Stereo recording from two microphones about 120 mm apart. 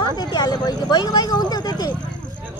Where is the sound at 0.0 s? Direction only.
35° left (ahead or behind).